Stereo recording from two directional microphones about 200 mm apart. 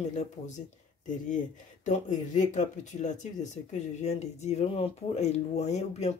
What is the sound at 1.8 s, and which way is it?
Speech, 35° left (ahead or behind).